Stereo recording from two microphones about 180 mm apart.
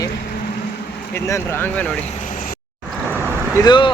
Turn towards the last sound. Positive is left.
turn(degrees=25)  # may be behind; listen again after turning